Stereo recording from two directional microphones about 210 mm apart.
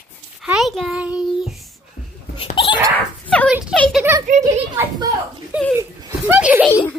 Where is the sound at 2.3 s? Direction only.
25° left (ahead or behind).